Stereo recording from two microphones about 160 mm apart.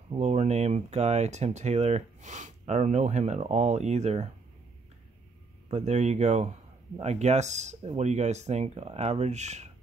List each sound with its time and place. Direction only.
0.1 s speech: 45° right (ahead or behind)
5.7 s speech: 45° right (ahead or behind)